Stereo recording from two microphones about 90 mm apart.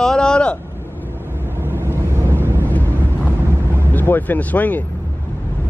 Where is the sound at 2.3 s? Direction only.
25° right (ahead or behind).